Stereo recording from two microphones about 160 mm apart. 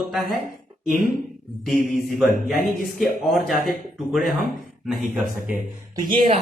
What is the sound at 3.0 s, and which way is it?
Speech, centre (ahead or behind).